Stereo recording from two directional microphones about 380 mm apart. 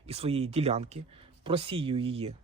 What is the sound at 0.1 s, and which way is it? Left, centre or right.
Speech, centre.